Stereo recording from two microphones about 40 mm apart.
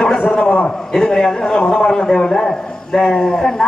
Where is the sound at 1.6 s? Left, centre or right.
Left.